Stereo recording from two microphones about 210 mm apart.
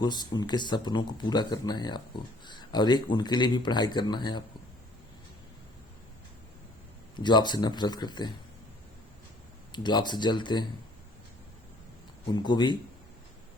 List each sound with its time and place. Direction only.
0.0 s speech: 20° left (ahead or behind)
7.2 s speech: 20° left (ahead or behind)
9.7 s speech: 20° left (ahead or behind)
12.3 s speech: 20° left (ahead or behind)